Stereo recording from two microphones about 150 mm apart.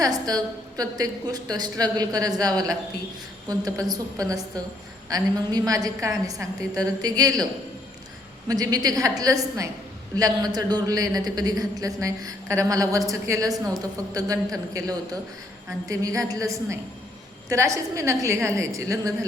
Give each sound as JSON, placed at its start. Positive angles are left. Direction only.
{"t": 0.0, "sound": "a man's voice", "side_deg": -25}
{"t": 8.4, "sound": "a man's voice", "side_deg": -25}